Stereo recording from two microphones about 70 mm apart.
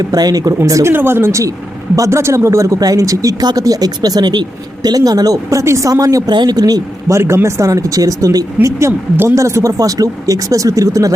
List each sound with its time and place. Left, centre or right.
0.0 s speech: right
0.9 s speech: right
3.4 s speech: right
6.3 s speech: right
7.1 s speech: right
8.9 s speech: right
9.3 s speech: right